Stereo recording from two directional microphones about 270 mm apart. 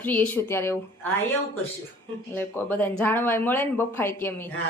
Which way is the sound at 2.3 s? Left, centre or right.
Centre.